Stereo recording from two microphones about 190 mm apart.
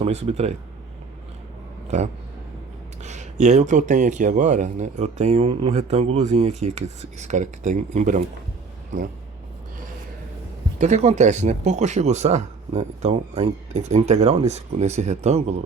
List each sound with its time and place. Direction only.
0.0 s speech: 35° right (ahead or behind)
3.0 s a sound: 40° right (ahead or behind)
3.4 s speech: 40° right (ahead or behind)
10.8 s speech: 35° right (ahead or behind)